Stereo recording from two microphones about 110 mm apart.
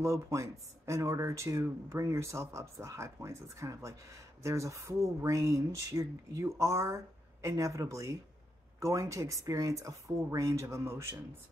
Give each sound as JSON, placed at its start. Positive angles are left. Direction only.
{"t": 0.0, "sound": "speech", "side_deg": -25}